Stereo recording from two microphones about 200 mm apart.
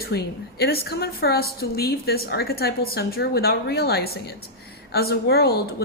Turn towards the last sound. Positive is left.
turn(degrees=50)  # may be behind; listen again after turning